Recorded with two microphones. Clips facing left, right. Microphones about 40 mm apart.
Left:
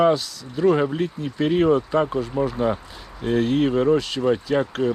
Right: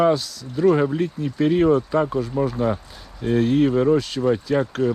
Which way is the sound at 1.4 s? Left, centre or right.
Left.